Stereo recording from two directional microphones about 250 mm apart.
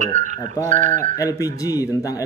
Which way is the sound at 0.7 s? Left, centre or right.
Right.